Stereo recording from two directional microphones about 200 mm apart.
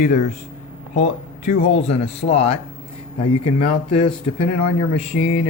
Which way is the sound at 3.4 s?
25° left (ahead or behind).